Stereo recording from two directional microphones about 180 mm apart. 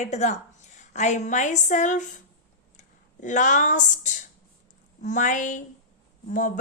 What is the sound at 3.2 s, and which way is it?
A woman's voice, 45° left (ahead or behind).